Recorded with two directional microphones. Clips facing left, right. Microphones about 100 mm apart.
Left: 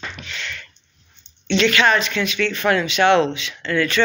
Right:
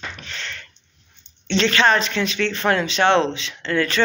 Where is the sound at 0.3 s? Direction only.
35° right (ahead or behind).